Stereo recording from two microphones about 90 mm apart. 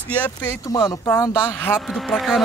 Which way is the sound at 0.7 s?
45° left (ahead or behind).